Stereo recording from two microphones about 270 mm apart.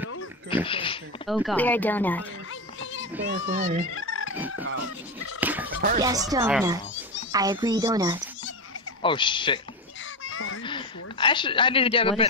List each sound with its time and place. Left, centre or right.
0.7 s speech: centre
1.2 s speech: centre
2.8 s a sound: left
3.2 s a child's voice: right
3.9 s fowl: left
5.4 s speech: centre
5.8 s a child's voice: right
6.0 s a woman's voice: centre
9.0 s speech: centre
10.2 s a sound: left
10.6 s a sound: centre